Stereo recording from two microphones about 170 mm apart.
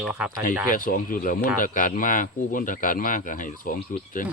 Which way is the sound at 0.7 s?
55° left (ahead or behind).